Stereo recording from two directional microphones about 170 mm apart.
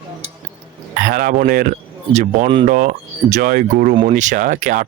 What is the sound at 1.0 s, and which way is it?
Speech, 55° right (ahead or behind).